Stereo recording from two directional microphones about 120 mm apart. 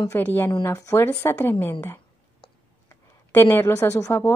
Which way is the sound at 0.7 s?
30° left (ahead or behind).